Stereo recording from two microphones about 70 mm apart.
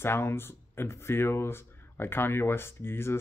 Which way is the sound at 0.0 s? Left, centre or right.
Left.